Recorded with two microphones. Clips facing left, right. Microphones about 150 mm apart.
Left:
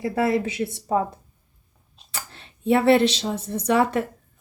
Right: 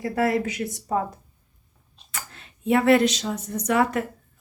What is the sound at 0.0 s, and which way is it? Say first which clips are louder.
Speech: left 1 dB; 25° left (ahead or behind).